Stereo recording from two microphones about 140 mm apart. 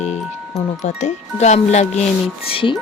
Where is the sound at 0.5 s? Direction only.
55° left (ahead or behind).